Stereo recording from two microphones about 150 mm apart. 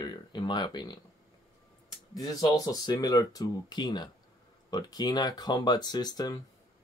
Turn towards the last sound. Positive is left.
turn(degrees=25)  # may be behind; listen again after turning